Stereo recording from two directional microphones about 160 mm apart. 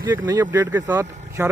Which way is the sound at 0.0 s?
25° right (ahead or behind).